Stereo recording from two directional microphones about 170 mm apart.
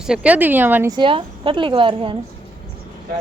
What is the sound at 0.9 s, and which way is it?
A woman's voice, 30° right (ahead or behind).